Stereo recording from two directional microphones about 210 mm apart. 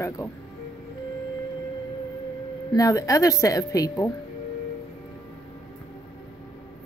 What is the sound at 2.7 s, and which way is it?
A woman's voice, 15° left (ahead or behind).